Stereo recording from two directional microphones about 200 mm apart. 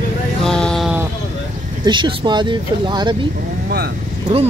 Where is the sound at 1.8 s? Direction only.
25° right (ahead or behind).